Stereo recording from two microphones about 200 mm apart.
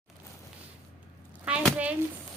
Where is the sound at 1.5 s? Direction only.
5° right (ahead or behind).